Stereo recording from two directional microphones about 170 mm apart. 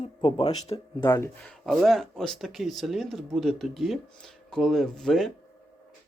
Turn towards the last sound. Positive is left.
turn(degrees=5)  # may be behind; listen again after turning